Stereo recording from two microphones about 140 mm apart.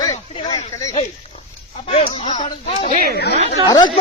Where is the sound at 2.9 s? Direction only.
65° right (ahead or behind).